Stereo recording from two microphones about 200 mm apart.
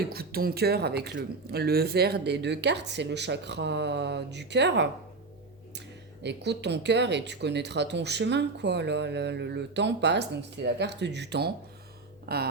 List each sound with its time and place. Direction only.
0.1 s speech: 50° right (ahead or behind)
6.2 s speech: 60° right (ahead or behind)